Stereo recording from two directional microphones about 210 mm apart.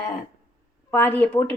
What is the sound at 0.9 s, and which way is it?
Speech, 10° left (ahead or behind).